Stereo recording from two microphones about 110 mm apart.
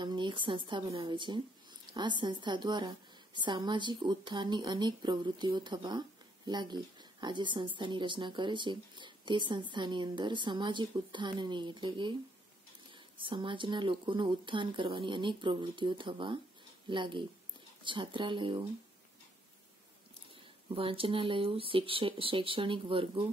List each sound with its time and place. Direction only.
0.0 s a woman's voice: 45° right (ahead or behind)
13.2 s a woman's voice: 50° right (ahead or behind)
20.7 s a woman's voice: 55° right (ahead or behind)